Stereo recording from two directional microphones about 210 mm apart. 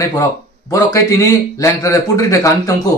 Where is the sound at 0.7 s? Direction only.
15° left (ahead or behind).